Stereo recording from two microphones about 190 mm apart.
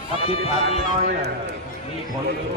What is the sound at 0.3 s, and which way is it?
Speech, 30° left (ahead or behind).